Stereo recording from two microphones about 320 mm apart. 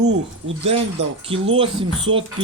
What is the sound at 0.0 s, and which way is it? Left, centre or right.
Speech, right.